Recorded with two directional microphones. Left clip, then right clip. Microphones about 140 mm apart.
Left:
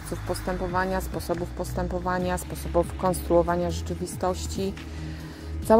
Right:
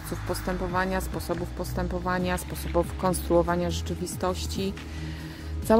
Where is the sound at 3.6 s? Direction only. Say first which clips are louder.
Left 1 dB; 20° right (ahead or behind).